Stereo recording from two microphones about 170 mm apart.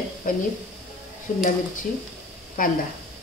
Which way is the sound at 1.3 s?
50° left (ahead or behind).